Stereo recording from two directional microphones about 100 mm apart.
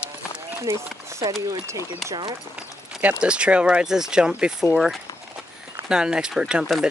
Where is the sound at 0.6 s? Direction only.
30° right (ahead or behind).